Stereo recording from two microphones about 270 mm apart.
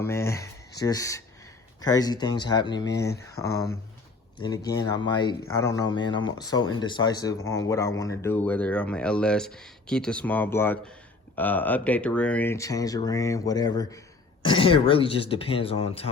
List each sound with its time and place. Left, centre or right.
0.0 s a sound: centre
0.8 s speech: centre
2.9 s speech: left
3.2 s speech: centre